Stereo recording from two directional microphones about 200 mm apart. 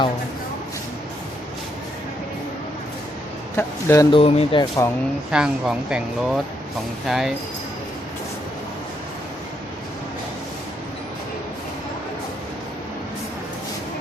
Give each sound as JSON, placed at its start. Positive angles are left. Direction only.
{"t": 3.6, "sound": "a man's voice", "side_deg": 15}
{"t": 4.2, "sound": "speech", "side_deg": 30}
{"t": 5.3, "sound": "speech", "side_deg": -5}